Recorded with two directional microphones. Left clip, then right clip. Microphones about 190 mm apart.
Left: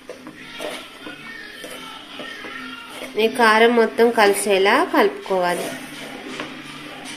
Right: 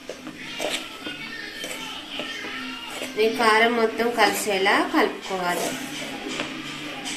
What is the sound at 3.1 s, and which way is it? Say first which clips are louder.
A woman's voice: left 4 dB; 55° left (ahead or behind).